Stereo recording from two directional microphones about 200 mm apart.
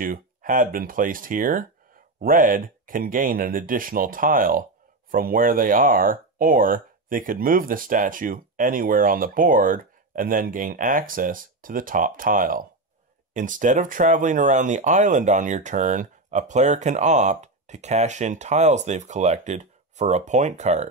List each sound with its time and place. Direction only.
0.0 s speech: 45° right (ahead or behind)